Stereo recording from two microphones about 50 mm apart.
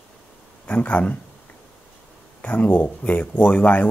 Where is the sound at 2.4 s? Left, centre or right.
Left.